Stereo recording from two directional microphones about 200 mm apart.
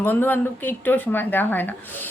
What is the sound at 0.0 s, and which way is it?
Speech, 10° left (ahead or behind).